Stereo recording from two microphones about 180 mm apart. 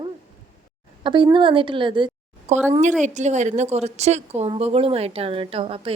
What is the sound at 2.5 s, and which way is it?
A woman's voice, 40° right (ahead or behind).